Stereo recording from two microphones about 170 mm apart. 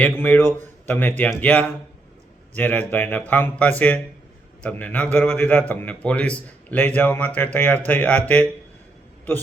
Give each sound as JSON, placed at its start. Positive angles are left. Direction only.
{"t": 0.2, "sound": "a man's voice", "side_deg": 10}